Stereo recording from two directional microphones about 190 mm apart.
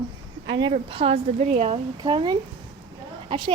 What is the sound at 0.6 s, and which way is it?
Speech, 30° right (ahead or behind).